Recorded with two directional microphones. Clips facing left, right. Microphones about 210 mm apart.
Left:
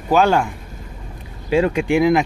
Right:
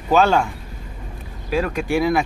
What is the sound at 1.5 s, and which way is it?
Speech, 25° left (ahead or behind).